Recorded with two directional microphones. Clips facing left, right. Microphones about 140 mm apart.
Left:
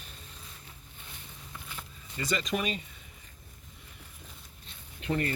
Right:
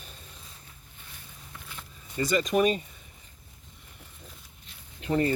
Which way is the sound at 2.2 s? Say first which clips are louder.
Right 7 dB; 40° right (ahead or behind).